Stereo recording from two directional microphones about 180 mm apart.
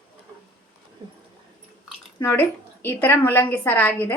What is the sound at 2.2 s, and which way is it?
A woman's voice, 10° left (ahead or behind).